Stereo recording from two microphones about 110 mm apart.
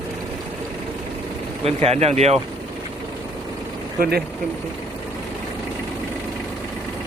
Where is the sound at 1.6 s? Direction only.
70° right (ahead or behind).